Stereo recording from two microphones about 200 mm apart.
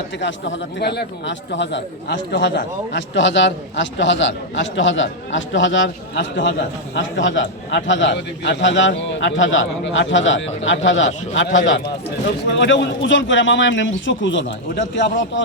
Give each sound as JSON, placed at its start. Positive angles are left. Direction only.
{"t": 0.2, "sound": "a man's voice", "side_deg": 65}